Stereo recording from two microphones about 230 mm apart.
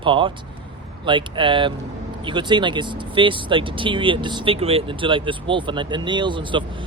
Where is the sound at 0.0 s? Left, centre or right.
Right.